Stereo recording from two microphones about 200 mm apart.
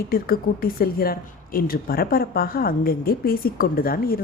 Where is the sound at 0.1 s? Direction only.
45° left (ahead or behind).